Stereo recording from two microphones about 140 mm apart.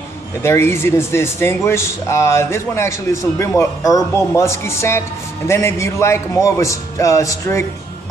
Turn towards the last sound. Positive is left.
turn(degrees=20)  # may be behind; listen again after turning